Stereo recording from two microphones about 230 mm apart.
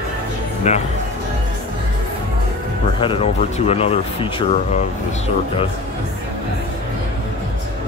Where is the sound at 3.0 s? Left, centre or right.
Left.